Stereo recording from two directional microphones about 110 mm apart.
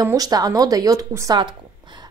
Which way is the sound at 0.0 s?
35° right (ahead or behind).